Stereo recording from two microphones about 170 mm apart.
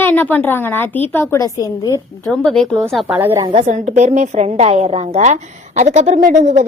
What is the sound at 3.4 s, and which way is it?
A woman's voice, 40° right (ahead or behind).